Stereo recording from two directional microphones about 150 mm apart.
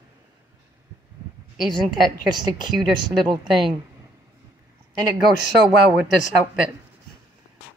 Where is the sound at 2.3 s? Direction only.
30° right (ahead or behind).